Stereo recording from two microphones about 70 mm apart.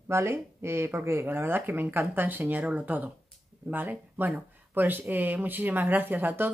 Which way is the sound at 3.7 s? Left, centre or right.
Right.